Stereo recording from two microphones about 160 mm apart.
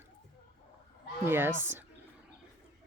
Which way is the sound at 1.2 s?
15° right (ahead or behind).